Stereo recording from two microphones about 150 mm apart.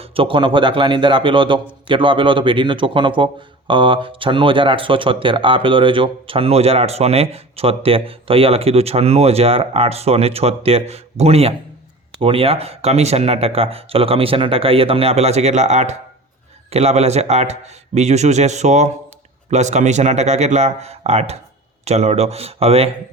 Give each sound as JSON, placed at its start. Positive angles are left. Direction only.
{"t": 0.0, "sound": "a man's voice", "side_deg": -40}